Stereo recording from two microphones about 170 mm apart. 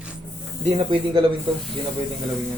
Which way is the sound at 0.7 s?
30° right (ahead or behind).